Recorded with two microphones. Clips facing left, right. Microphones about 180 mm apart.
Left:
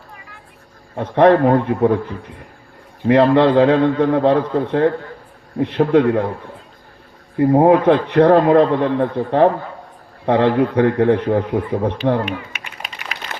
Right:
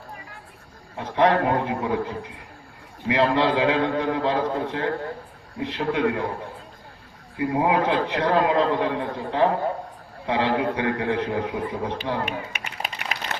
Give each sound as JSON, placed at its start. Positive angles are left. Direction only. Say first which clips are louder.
{"t": 0.9, "sound": "a man's voice", "louder": "left 8 dB", "side_deg": 55}
{"t": 3.1, "sound": "a man's voice", "louder": "left 8 dB", "side_deg": 55}
{"t": 7.3, "sound": "a man's voice", "louder": "left 10 dB", "side_deg": 45}